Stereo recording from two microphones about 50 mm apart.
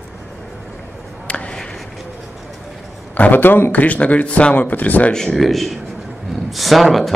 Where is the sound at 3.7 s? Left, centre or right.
Left.